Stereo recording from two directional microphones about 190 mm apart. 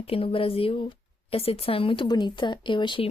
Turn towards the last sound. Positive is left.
turn(degrees=25)  # may be behind; listen again after turning